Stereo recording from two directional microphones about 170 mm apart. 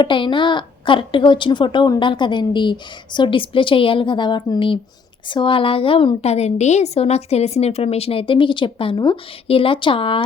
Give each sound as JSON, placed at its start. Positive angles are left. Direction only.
{"t": 0.0, "sound": "a woman's voice", "side_deg": 30}